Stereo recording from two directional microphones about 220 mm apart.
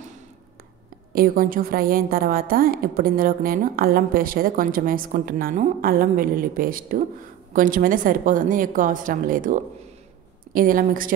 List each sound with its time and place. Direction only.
1.1 s a woman's voice: 40° right (ahead or behind)